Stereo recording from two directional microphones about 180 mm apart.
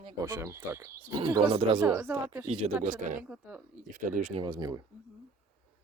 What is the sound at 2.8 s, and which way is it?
Speech, 45° right (ahead or behind).